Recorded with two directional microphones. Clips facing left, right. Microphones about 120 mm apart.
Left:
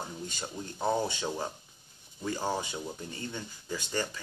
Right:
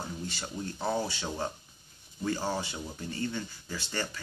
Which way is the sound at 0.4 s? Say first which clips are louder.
Left 2 dB; 20° left (ahead or behind).